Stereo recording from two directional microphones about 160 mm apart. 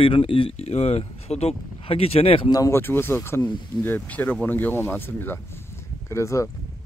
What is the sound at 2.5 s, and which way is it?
Speech, 15° left (ahead or behind).